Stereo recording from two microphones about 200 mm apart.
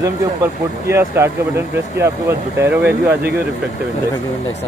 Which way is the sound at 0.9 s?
10° right (ahead or behind).